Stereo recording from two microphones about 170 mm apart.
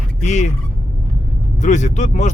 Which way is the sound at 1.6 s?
45° left (ahead or behind).